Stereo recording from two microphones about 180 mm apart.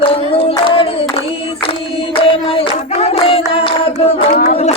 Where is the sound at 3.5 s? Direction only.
30° left (ahead or behind).